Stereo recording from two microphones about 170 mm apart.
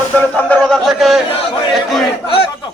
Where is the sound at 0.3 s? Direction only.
10° left (ahead or behind).